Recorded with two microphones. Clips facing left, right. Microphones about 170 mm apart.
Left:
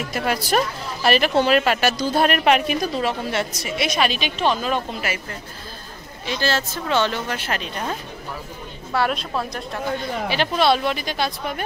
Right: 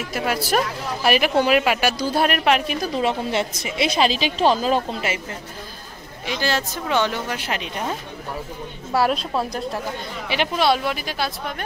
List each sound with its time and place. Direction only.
0.1 s speech: 5° right (ahead or behind)
2.9 s a woman's voice: 20° right (ahead or behind)
6.2 s speech: 15° right (ahead or behind)
8.9 s speech: 35° right (ahead or behind)
10.5 s speech: 10° right (ahead or behind)